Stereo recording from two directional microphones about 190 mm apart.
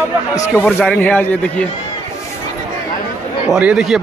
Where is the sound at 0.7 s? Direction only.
5° left (ahead or behind).